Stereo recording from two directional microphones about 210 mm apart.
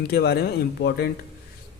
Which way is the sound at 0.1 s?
50° left (ahead or behind).